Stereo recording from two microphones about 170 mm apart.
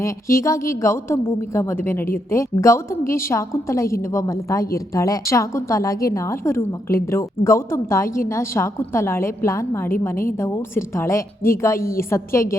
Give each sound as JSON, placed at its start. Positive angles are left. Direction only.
{"t": 0.0, "sound": "a woman's voice", "side_deg": 15}